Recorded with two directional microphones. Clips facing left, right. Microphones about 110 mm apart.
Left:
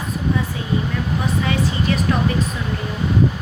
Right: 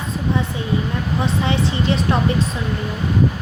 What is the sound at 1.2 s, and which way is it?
Speech, 25° right (ahead or behind).